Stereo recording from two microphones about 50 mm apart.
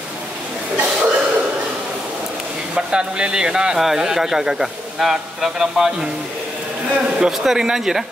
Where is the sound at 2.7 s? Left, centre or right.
Centre.